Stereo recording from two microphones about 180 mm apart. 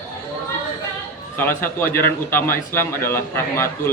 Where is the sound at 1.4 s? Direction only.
10° left (ahead or behind).